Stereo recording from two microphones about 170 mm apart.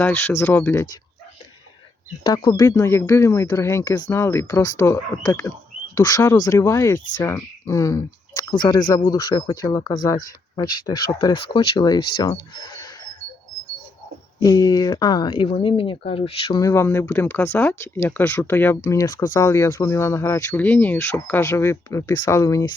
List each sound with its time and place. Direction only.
0.0 s speech: 15° left (ahead or behind)
2.3 s speech: 25° left (ahead or behind)
14.3 s speech: 20° left (ahead or behind)
16.6 s speech: 15° left (ahead or behind)